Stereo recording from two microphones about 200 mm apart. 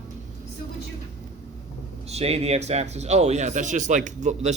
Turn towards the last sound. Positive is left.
turn(degrees=-35)  # may be behind; listen again after turning